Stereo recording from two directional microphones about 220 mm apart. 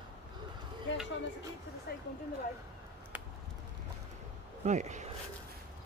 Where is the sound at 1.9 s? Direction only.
45° left (ahead or behind).